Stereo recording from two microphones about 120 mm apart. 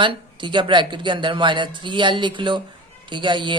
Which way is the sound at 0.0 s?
40° right (ahead or behind).